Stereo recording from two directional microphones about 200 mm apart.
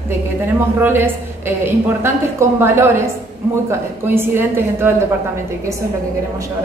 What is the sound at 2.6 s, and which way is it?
Speech, 10° right (ahead or behind).